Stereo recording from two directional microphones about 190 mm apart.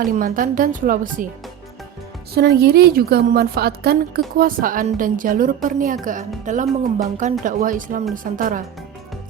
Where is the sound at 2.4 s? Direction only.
55° right (ahead or behind).